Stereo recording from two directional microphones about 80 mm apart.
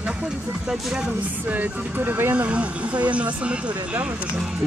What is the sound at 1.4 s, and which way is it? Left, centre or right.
Speech, right.